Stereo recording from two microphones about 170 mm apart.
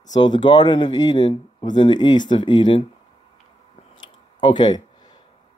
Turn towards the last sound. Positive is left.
turn(degrees=25)  # may be behind; listen again after turning